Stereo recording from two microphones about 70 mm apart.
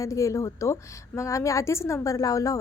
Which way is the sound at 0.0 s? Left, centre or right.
Left.